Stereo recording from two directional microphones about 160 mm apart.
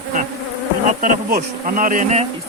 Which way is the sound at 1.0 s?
60° right (ahead or behind).